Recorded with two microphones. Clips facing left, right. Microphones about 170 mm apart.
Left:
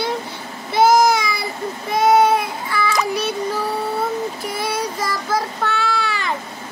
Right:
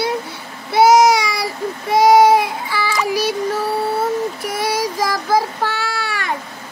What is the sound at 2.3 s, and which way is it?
Baby cry, 90° right.